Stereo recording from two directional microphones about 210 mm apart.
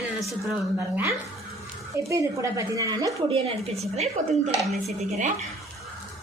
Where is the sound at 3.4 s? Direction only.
30° right (ahead or behind).